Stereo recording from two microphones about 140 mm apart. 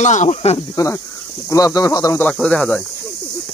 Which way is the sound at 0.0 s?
55° left (ahead or behind).